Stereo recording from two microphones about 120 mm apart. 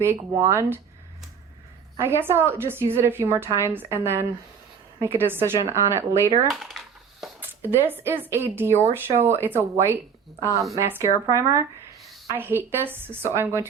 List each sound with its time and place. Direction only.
0.0 s a woman's voice: 25° right (ahead or behind)
2.0 s a woman's voice: 20° right (ahead or behind)
6.5 s crushing: centre (ahead or behind)
7.6 s a woman's voice: 15° right (ahead or behind)